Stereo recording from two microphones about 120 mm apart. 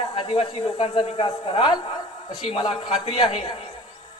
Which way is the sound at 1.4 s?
45° left (ahead or behind).